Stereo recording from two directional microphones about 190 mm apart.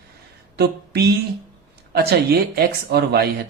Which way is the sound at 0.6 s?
60° right (ahead or behind).